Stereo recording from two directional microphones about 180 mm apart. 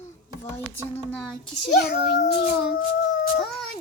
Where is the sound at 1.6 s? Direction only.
65° left (ahead or behind).